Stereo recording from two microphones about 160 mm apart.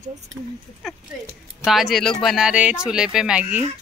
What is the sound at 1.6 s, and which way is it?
Speech, centre (ahead or behind).